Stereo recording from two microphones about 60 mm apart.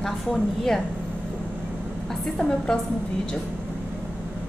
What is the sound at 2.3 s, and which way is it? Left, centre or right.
Speech, centre.